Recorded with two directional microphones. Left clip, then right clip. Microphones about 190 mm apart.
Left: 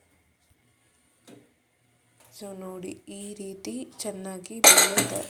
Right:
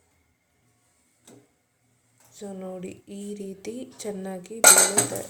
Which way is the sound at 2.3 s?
15° left (ahead or behind).